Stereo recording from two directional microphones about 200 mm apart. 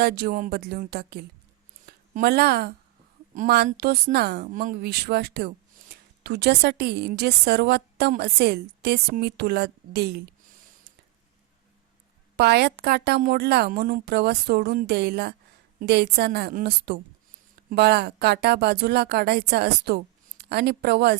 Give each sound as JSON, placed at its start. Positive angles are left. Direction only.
{"t": 0.0, "sound": "a woman's voice", "side_deg": -50}
{"t": 12.4, "sound": "a woman's voice", "side_deg": -55}